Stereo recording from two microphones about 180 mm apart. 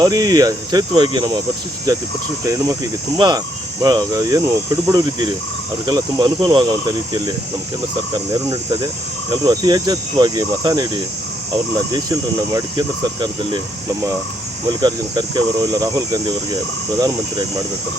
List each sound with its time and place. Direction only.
0.0 s speech: 20° right (ahead or behind)
11.9 s speech: 20° right (ahead or behind)
14.8 s speech: 25° right (ahead or behind)